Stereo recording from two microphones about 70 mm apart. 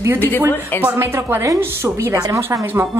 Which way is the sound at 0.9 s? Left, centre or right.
Right.